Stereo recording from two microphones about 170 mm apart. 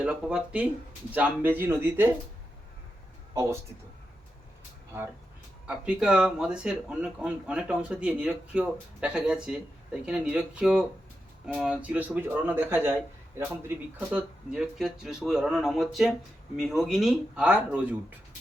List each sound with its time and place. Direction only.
0.0 s speech: 5° right (ahead or behind)
3.3 s speech: 15° right (ahead or behind)
5.6 s speech: 5° right (ahead or behind)